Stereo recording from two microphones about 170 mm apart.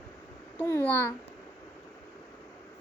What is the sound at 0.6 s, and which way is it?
Speech, 15° left (ahead or behind).